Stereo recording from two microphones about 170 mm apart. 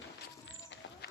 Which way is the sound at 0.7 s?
90° left.